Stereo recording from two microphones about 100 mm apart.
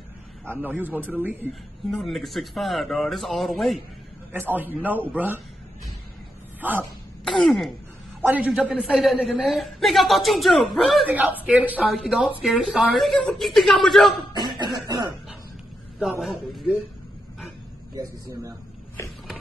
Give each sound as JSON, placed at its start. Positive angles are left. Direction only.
{"t": 0.5, "sound": "speech", "side_deg": -20}
{"t": 1.5, "sound": "a woman's voice", "side_deg": 0}
{"t": 4.3, "sound": "speech", "side_deg": -20}
{"t": 6.6, "sound": "a woman's voice", "side_deg": -20}
{"t": 7.2, "sound": "a woman's voice", "side_deg": 0}
{"t": 11.1, "sound": "a woman's voice", "side_deg": -15}
{"t": 11.9, "sound": "a woman's voice", "side_deg": -5}
{"t": 14.3, "sound": "cough", "side_deg": -45}
{"t": 16.0, "sound": "a woman's voice", "side_deg": 0}